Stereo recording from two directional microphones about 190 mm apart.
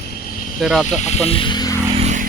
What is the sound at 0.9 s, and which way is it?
Speech, 35° left (ahead or behind).